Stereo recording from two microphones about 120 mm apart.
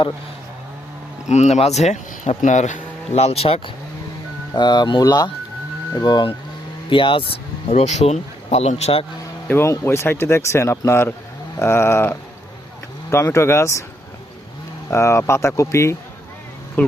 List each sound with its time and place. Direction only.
1.3 s speech: 65° left (ahead or behind)
2.4 s speech: 85° left; by 3.6 s 55° left (ahead or behind)
4.5 s speech: 35° left (ahead or behind)
7.7 s a man's voice: 70° left (ahead or behind)
9.5 s speech: 20° left (ahead or behind)
14.8 s speech: 20° left (ahead or behind)
16.8 s speech: 10° left (ahead or behind)